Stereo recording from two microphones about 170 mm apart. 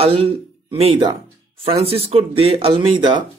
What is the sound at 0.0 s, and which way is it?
Speech, 35° right (ahead or behind).